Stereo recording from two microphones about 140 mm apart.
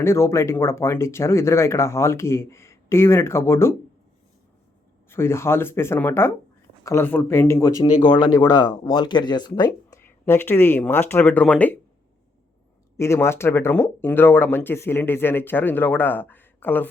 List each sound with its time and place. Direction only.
0.0 s speech: 20° left (ahead or behind)
5.0 s speech: 15° left (ahead or behind)
10.0 s speech: 15° left (ahead or behind)
13.0 s speech: 20° left (ahead or behind)